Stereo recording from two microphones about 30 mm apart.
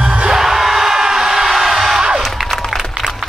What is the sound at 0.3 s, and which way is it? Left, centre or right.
Music, centre.